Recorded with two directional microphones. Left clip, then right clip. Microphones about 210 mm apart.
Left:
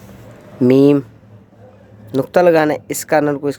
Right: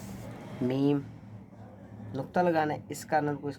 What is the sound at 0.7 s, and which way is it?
Speech, 55° left (ahead or behind).